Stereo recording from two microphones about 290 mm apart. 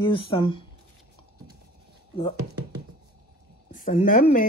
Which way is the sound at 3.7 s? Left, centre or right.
Left.